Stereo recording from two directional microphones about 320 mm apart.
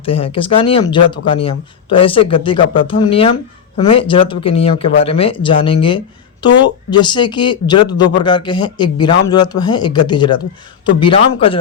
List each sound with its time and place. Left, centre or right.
0.0 s speech: centre